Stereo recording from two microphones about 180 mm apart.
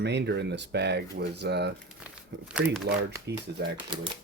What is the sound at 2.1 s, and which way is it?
Speech, 5° right (ahead or behind).